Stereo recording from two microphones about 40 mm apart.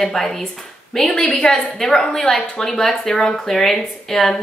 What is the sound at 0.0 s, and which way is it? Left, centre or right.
Speech, centre.